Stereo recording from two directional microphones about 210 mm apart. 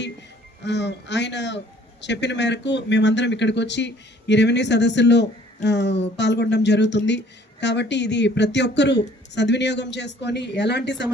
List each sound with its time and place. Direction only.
0.6 s a man's voice: 55° left (ahead or behind)